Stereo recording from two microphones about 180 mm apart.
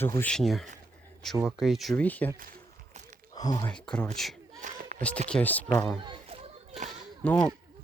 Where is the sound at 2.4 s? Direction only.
50° right (ahead or behind).